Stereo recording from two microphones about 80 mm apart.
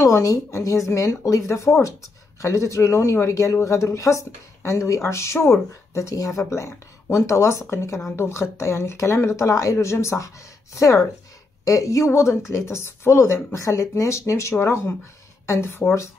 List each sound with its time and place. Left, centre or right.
0.0 s speech: left